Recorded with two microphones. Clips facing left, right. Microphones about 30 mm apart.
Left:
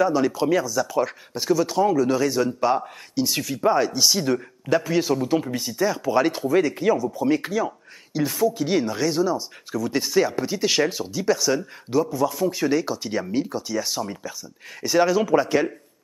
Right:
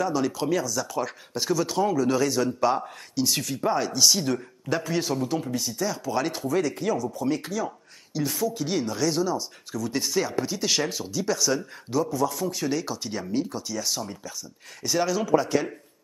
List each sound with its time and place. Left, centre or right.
0.0 s speech: centre
5.3 s speech: left